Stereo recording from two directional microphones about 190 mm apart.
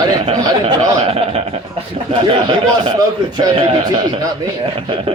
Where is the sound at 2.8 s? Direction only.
20° right (ahead or behind).